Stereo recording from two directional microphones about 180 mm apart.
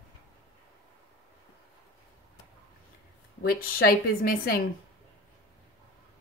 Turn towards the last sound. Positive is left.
turn(degrees=55)  # may be behind; listen again after turning